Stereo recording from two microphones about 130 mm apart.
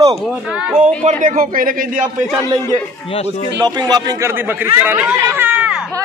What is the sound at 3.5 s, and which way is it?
Speech, 30° right (ahead or behind).